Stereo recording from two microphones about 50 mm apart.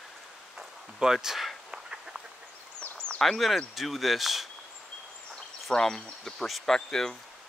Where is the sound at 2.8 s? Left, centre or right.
Centre.